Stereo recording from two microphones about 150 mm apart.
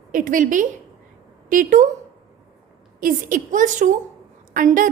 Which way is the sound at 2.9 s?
65° right (ahead or behind).